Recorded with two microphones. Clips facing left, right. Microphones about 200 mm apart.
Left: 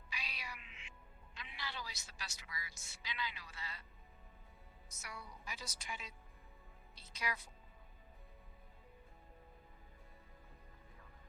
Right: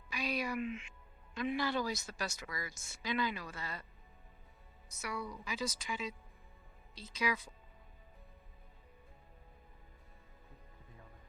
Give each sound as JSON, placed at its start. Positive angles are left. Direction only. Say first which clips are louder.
{"t": 0.1, "sound": "a man's voice", "louder": "right 15 dB", "side_deg": -45}
{"t": 4.9, "sound": "a woman's voice", "louder": "right 12 dB", "side_deg": -70}